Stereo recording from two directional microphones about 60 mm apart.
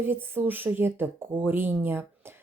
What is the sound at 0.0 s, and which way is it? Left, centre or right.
A woman's voice, right.